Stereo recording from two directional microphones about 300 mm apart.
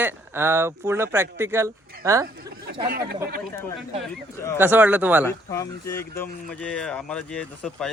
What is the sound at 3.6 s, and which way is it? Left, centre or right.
Speech, centre.